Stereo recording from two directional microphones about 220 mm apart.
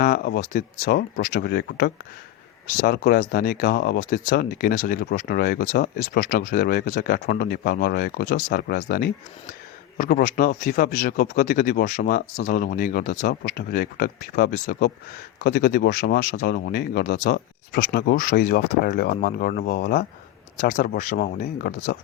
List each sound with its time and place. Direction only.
0.0 s speech: 40° left (ahead or behind)